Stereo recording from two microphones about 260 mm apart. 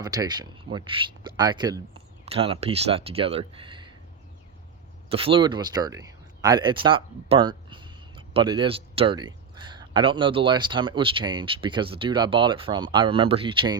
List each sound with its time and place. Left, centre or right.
0.0 s speech: centre
5.1 s speech: right